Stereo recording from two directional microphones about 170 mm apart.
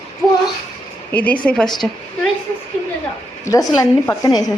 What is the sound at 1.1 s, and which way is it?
Speech, 10° left (ahead or behind).